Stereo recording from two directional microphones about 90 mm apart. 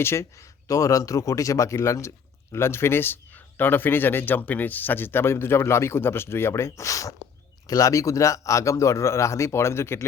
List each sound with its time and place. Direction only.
0.0 s speech: 30° left (ahead or behind)